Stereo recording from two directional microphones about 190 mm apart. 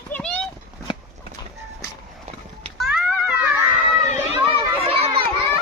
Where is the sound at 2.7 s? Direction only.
Centre (ahead or behind).